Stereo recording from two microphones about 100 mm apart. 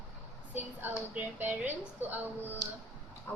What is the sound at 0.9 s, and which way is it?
Speech, 15° right (ahead or behind).